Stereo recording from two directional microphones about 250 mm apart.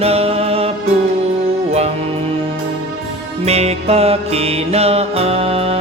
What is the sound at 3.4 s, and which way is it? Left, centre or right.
Music, right.